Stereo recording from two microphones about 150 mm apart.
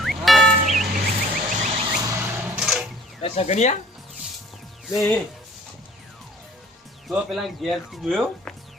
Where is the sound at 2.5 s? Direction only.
5° right (ahead or behind).